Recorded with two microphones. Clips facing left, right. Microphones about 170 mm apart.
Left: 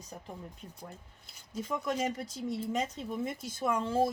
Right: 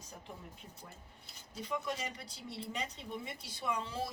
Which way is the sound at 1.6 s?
45° left (ahead or behind).